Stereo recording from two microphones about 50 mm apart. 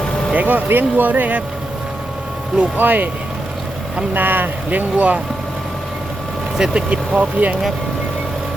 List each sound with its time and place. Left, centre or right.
0.0 s vehicle: centre
0.3 s speech: right
2.6 s speech: right
4.1 s speech: right
6.6 s speech: centre